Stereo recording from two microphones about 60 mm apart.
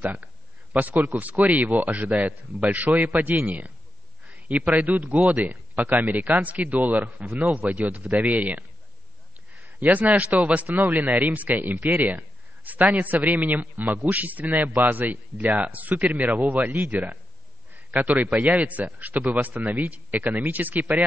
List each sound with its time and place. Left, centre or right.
0.0 s a man's voice: right
17.9 s a man's voice: right